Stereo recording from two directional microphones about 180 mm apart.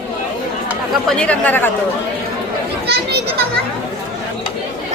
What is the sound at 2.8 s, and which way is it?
Children playing, 65° right (ahead or behind).